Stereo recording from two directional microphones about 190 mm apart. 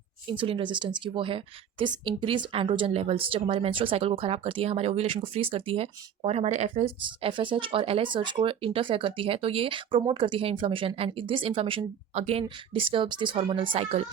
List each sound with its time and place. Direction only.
0.3 s a woman's voice: 25° right (ahead or behind)